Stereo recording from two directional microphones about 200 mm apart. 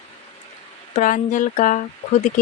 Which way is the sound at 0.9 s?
40° left (ahead or behind).